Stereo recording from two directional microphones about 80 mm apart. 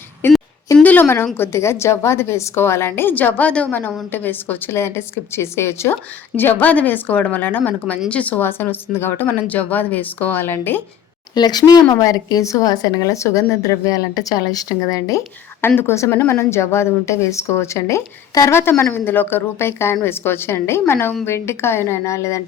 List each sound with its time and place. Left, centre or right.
0.2 s a sound: left
1.0 s a woman's voice: left
11.3 s a woman's voice: left
15.6 s a woman's voice: left
18.6 s a woman's voice: left